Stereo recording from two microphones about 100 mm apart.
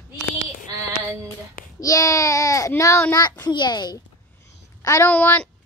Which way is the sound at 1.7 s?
35° left (ahead or behind).